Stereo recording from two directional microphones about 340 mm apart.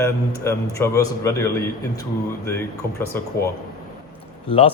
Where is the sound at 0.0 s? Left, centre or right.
Centre.